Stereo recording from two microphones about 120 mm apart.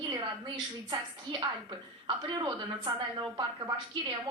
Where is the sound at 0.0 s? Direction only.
35° right (ahead or behind).